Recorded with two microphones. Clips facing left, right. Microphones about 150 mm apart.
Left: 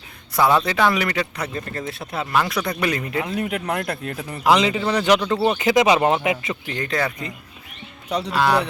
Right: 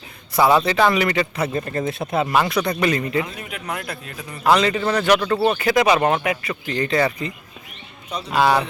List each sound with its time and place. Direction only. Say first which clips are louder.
0.3 s speech: right 2 dB; centre (ahead or behind)
1.5 s speech: right 6 dB; 20° right (ahead or behind)
2.3 s speech: left 1 dB; 5° right (ahead or behind)
3.2 s speech: left 9 dB; 65° left (ahead or behind)
3.7 s speech: left 5 dB; 50° left (ahead or behind)
4.4 s speech: right 1 dB; 15° left (ahead or behind)
6.7 s speech: right 5 dB; centre (ahead or behind)
8.3 s speech: right 2 dB; 5° right (ahead or behind)